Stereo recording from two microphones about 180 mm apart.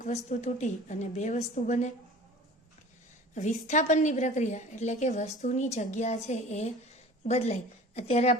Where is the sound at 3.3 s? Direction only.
40° left (ahead or behind).